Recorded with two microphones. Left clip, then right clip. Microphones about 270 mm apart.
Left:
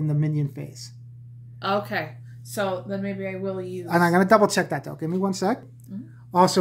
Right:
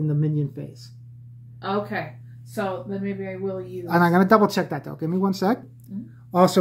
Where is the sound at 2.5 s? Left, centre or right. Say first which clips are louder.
Left 1 dB; left.